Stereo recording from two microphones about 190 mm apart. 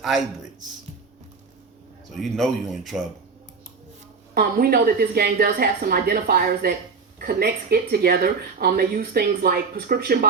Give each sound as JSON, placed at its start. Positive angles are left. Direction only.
{"t": 2.1, "sound": "speech", "side_deg": 0}
{"t": 4.4, "sound": "speech", "side_deg": -50}